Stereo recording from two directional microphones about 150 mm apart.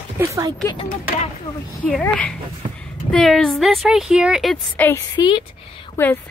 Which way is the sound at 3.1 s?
5° left (ahead or behind).